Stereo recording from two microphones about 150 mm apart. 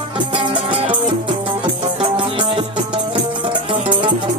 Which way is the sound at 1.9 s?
35° right (ahead or behind).